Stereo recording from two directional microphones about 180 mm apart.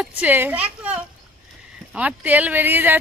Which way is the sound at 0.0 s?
10° right (ahead or behind).